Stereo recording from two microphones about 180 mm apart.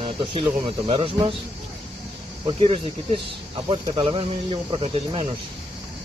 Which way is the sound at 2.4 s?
30° right (ahead or behind).